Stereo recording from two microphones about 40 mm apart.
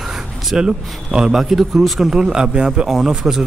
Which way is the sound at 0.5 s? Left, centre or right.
Centre.